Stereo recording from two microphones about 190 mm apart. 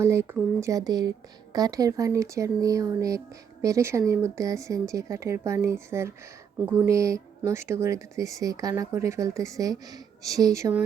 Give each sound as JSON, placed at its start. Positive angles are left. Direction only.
{"t": 0.0, "sound": "speech", "side_deg": -15}